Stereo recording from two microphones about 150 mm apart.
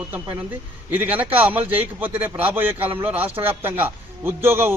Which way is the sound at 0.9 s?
10° right (ahead or behind).